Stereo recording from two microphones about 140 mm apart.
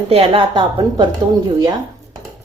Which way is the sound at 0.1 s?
40° right (ahead or behind).